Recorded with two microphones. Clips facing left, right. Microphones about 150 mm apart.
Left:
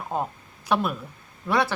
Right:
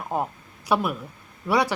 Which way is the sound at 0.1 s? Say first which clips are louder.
Right 1 dB; 10° right (ahead or behind).